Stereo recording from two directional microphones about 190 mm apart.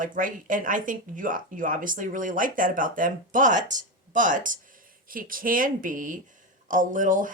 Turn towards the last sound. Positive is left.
turn(degrees=-45)  # may be behind; listen again after turning